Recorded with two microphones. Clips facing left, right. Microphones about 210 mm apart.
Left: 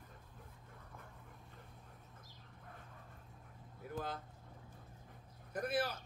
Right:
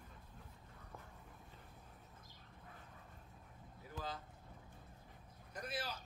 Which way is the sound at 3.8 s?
55° left (ahead or behind).